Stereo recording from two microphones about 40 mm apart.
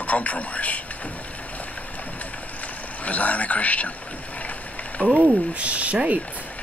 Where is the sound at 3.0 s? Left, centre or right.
Left.